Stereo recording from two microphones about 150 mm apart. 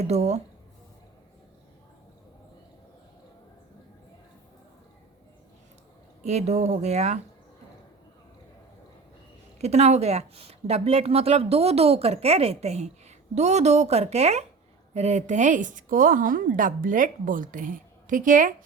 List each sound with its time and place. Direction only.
0.0 s a woman's voice: 45° right (ahead or behind)
6.2 s a woman's voice: 45° right (ahead or behind)
9.6 s a woman's voice: 45° right (ahead or behind)